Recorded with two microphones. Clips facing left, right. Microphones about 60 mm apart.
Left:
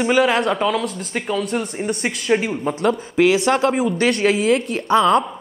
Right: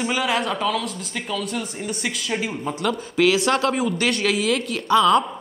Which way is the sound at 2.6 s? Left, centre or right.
Left.